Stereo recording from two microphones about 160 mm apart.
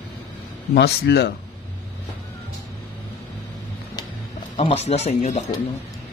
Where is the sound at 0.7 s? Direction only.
90° left.